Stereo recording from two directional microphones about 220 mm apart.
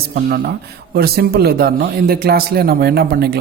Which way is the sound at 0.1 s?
45° right (ahead or behind).